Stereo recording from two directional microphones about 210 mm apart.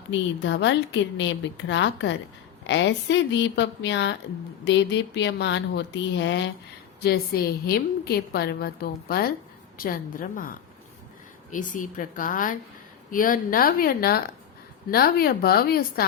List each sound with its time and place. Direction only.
0.1 s a woman's voice: 60° left (ahead or behind)
7.0 s a woman's voice: 45° left (ahead or behind)
11.5 s a woman's voice: 40° left (ahead or behind)